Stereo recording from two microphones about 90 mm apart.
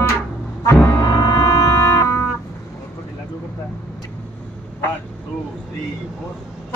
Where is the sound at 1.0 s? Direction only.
40° left (ahead or behind).